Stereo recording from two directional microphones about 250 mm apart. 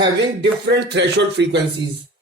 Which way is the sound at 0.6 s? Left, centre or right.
Right.